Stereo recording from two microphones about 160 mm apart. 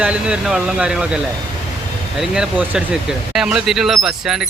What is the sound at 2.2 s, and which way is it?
Speech, 5° right (ahead or behind).